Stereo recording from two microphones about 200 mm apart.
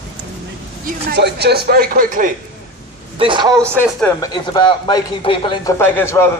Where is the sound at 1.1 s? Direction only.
55° right (ahead or behind).